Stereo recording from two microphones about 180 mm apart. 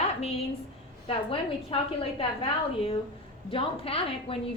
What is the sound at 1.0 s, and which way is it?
A woman's voice, 30° left (ahead or behind).